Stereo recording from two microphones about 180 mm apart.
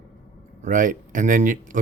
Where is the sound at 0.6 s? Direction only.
45° right (ahead or behind).